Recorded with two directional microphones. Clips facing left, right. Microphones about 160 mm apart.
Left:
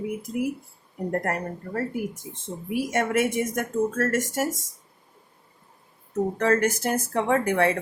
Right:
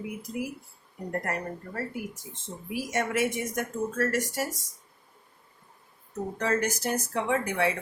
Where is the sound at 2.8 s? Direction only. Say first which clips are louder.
Left 4 dB; 55° left (ahead or behind).